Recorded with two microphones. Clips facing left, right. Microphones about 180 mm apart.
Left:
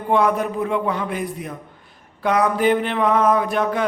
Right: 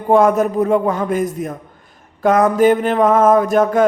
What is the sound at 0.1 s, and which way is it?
A man's voice, 45° right (ahead or behind).